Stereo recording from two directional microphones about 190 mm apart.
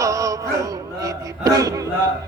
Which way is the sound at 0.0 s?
15° right (ahead or behind).